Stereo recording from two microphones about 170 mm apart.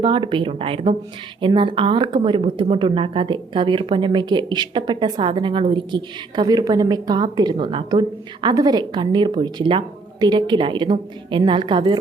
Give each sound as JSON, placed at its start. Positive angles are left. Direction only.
{"t": 0.0, "sound": "speech", "side_deg": -30}